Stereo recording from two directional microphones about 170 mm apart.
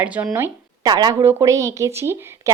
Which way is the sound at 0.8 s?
25° right (ahead or behind).